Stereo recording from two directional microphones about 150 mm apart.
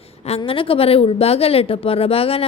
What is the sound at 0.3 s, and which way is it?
A woman's voice, 40° left (ahead or behind).